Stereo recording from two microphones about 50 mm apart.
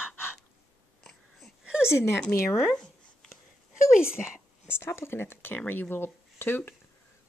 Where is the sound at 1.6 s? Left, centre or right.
Centre.